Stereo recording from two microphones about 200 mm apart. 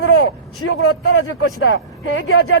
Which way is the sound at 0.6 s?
60° left (ahead or behind).